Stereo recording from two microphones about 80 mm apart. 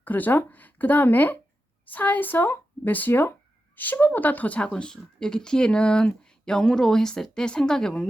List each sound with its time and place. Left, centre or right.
0.0 s speech: left